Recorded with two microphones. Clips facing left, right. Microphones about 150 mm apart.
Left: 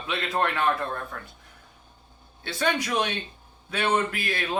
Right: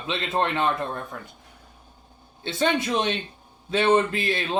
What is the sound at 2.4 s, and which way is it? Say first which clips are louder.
Speech: right 3 dB; 25° right (ahead or behind).